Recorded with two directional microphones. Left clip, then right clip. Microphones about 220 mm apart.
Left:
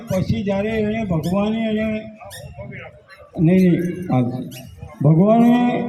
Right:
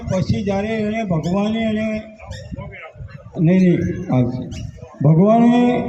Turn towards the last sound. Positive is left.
turn(degrees=-25)  # may be behind; listen again after turning